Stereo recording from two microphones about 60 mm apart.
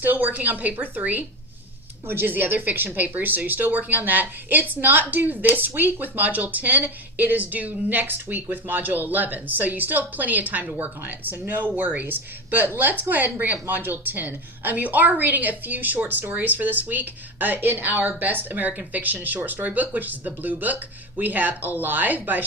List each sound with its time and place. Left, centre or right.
0.0 s speech: right